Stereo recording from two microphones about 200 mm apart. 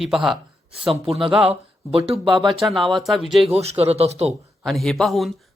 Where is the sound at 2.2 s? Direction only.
25° right (ahead or behind).